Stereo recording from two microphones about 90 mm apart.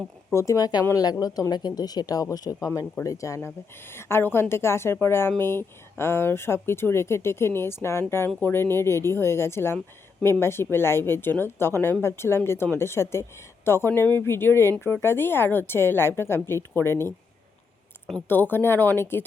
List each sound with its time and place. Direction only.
0.3 s speech: 35° left (ahead or behind)
18.3 s speech: 20° left (ahead or behind)